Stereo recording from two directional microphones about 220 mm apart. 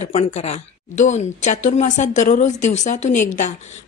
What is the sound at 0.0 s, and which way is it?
A woman's voice, 30° left (ahead or behind).